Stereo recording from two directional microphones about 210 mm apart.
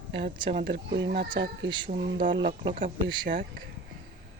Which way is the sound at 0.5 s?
55° right (ahead or behind).